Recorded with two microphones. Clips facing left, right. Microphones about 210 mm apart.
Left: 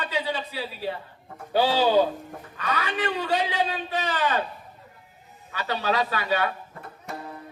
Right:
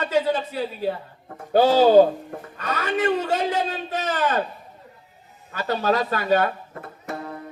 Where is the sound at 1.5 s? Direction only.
45° right (ahead or behind).